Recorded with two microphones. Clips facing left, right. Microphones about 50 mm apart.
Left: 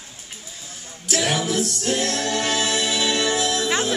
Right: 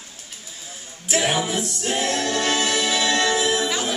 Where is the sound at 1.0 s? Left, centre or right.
Centre.